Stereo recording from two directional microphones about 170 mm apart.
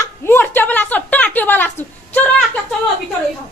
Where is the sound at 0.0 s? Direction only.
15° left (ahead or behind).